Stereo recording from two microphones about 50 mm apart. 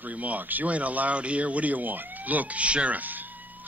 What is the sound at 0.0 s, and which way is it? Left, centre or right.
Speech, right.